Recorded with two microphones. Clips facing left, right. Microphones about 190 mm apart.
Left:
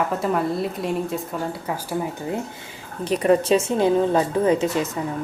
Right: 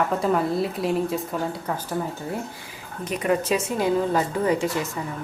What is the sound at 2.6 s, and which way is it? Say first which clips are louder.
A woman's voice: left 3 dB; 30° left (ahead or behind).